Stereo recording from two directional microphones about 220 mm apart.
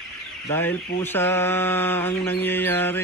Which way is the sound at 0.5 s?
10° left (ahead or behind).